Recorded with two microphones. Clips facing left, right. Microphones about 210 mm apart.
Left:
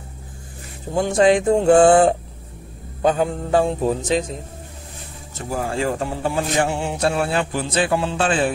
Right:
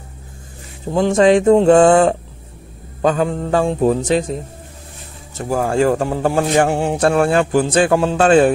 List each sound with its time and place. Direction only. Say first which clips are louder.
0.9 s music: right 4 dB; 90° right; by 1.8 s 75° right (ahead or behind)
1.9 s a sound: right 2 dB; 90° right
3.1 s mantra: right 2 dB; 65° right (ahead or behind)
3.6 s music: right 5 dB; 60° right (ahead or behind)
5.5 s a man's voice: right 7 dB; 50° right (ahead or behind)